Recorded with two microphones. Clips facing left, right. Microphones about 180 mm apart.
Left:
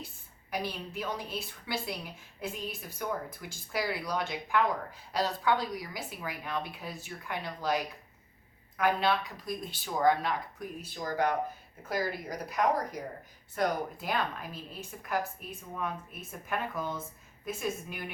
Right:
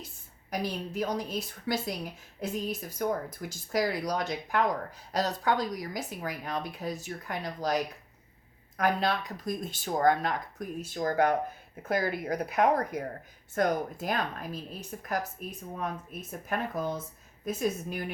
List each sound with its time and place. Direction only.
0.5 s a woman's voice: 40° right (ahead or behind)
8.8 s speech: 40° right (ahead or behind); by 13.1 s 55° right (ahead or behind)
13.6 s a woman's voice: 45° right (ahead or behind)